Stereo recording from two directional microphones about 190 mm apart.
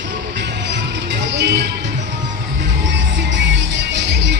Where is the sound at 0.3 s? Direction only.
65° right (ahead or behind).